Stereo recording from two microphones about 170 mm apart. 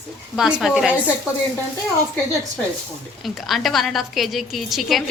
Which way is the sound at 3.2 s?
Centre (ahead or behind).